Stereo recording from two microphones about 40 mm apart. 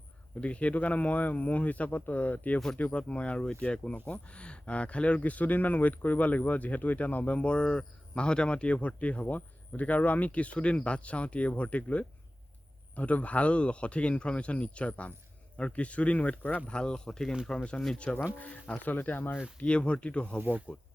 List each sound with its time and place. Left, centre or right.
0.3 s speech: left
2.9 s speech: left
16.6 s speech: left
18.3 s speech: left
19.5 s speech: left
20.7 s speech: right